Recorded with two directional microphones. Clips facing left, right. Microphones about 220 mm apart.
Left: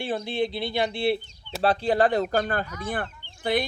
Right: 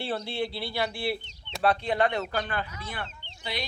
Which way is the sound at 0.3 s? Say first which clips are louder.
Left 5 dB; 20° left (ahead or behind).